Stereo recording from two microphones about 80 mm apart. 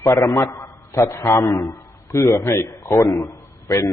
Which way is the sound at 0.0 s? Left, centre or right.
Left.